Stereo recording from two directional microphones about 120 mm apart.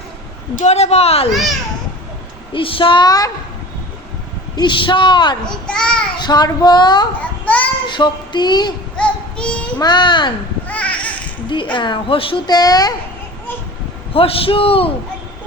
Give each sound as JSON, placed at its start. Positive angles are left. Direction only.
{"t": 0.6, "sound": "speech", "side_deg": 65}
{"t": 1.3, "sound": "a child's voice", "side_deg": 0}
{"t": 2.5, "sound": "a woman's voice", "side_deg": 45}
{"t": 4.5, "sound": "speech", "side_deg": 40}
{"t": 5.5, "sound": "a child's voice", "side_deg": 5}
{"t": 6.1, "sound": "speech", "side_deg": 35}
{"t": 7.4, "sound": "child singing", "side_deg": 10}
{"t": 7.9, "sound": "speech", "side_deg": 40}
{"t": 9.0, "sound": "child singing", "side_deg": 10}
{"t": 9.7, "sound": "speech", "side_deg": 40}
{"t": 10.7, "sound": "babbling", "side_deg": 10}
{"t": 11.4, "sound": "a woman's voice", "side_deg": 40}
{"t": 12.5, "sound": "speech", "side_deg": 35}
{"t": 14.1, "sound": "a woman's voice", "side_deg": 50}